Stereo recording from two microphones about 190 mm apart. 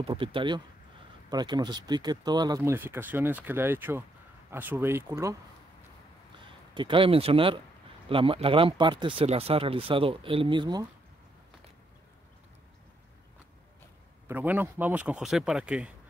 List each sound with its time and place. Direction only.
0.0 s speech: 25° right (ahead or behind)
6.7 s speech: 25° right (ahead or behind)
14.2 s speech: 10° right (ahead or behind)